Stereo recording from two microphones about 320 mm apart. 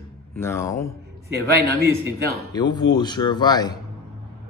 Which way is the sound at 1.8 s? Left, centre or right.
Centre.